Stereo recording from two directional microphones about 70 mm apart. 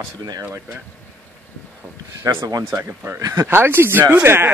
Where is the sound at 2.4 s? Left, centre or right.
Right.